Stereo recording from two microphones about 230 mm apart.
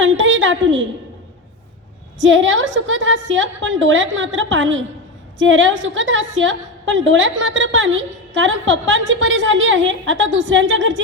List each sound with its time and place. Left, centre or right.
0.0 s a woman's voice: right
2.2 s a woman's voice: right